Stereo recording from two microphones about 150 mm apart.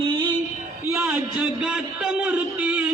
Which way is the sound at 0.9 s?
10° right (ahead or behind).